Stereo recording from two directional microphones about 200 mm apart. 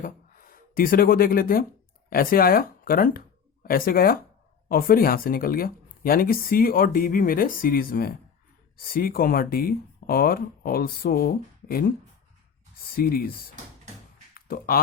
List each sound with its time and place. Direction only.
0.0 s speech: 45° left (ahead or behind)
13.0 s speech: 50° left (ahead or behind)
14.3 s speech: 45° left (ahead or behind)